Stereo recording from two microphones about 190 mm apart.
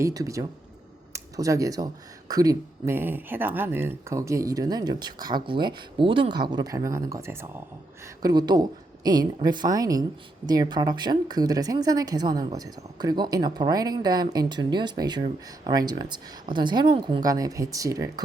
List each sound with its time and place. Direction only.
0.0 s speech: 15° right (ahead or behind)